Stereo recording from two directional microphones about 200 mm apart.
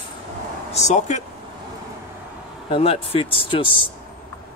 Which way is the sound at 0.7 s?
35° left (ahead or behind).